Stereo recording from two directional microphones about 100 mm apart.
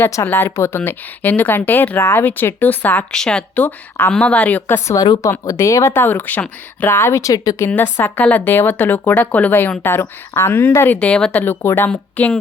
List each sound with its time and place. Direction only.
0.0 s a woman's voice: 25° left (ahead or behind)
5.5 s a woman's voice: 30° left (ahead or behind)
7.9 s a woman's voice: 20° left (ahead or behind)
11.0 s speech: 10° left (ahead or behind)
11.9 s speech: 10° left (ahead or behind)